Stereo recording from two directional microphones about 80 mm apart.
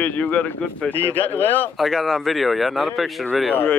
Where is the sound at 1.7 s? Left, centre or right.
Centre.